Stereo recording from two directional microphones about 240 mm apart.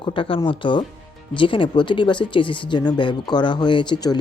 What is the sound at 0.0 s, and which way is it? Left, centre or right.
Speech, left.